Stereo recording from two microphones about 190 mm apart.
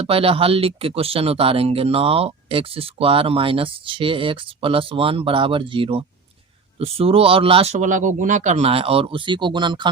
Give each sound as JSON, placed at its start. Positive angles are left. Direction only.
{"t": 0.0, "sound": "speech", "side_deg": -30}